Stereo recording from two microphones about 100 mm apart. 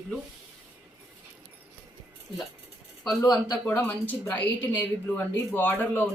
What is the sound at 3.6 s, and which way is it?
Speech, 15° left (ahead or behind).